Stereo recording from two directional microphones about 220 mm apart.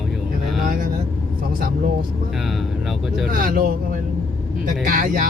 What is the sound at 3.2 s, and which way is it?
Speech, 40° right (ahead or behind).